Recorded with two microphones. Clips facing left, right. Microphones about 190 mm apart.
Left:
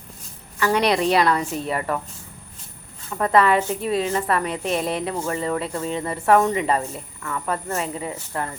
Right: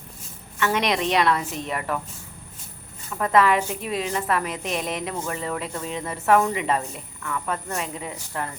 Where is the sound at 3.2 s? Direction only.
Centre (ahead or behind).